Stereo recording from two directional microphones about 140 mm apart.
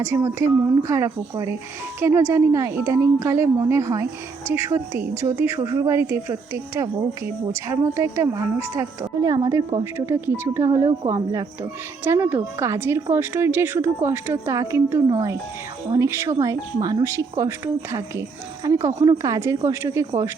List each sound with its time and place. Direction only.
0.0 s speech: 20° right (ahead or behind)